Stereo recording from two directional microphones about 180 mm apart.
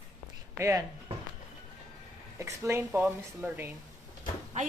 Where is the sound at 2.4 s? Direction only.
15° right (ahead or behind).